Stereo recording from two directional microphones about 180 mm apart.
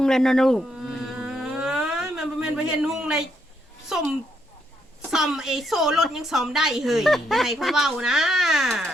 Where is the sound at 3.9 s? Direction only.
Centre (ahead or behind).